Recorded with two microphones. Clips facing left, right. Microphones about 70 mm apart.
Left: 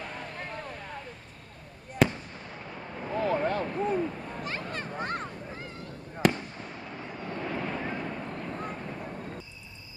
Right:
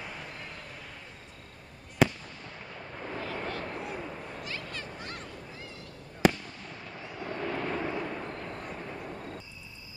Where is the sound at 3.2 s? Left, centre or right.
Left.